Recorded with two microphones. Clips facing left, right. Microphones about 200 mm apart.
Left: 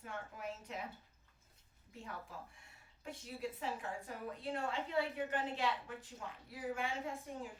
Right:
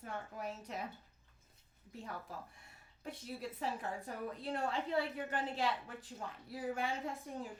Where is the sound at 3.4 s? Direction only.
35° right (ahead or behind).